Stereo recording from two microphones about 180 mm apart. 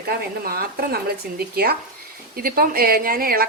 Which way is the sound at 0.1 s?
55° right (ahead or behind).